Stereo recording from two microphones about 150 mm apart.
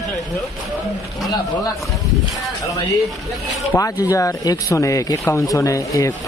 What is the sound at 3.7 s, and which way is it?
Speech, 20° left (ahead or behind).